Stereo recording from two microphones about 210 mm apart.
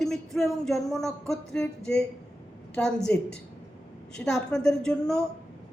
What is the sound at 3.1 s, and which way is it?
A woman's voice, 10° left (ahead or behind).